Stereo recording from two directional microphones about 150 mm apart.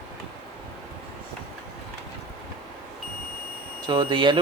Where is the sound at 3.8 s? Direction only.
30° right (ahead or behind).